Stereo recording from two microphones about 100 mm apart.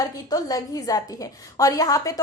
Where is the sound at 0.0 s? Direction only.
40° left (ahead or behind).